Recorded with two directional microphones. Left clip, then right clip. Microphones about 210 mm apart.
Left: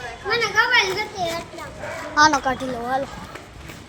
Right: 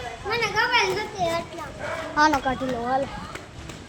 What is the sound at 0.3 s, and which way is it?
Speech, 30° left (ahead or behind).